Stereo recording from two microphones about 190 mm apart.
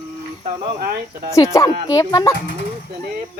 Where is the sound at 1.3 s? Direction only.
15° left (ahead or behind).